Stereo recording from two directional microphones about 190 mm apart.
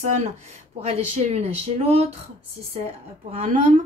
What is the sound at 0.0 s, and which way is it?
A woman's voice, 40° right (ahead or behind).